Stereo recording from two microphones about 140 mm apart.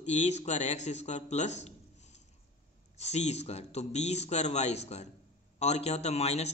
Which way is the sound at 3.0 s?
50° left (ahead or behind).